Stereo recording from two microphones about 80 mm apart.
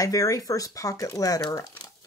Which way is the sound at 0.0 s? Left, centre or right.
Left.